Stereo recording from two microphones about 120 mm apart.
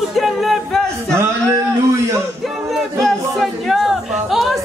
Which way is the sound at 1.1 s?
25° right (ahead or behind).